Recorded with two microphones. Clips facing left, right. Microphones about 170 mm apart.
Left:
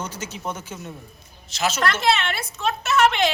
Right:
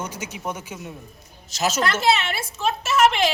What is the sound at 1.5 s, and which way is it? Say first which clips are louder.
Speech: right 1 dB; 40° right (ahead or behind).